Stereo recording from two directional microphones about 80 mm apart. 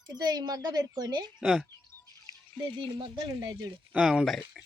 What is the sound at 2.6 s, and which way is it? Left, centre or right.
Speech, right.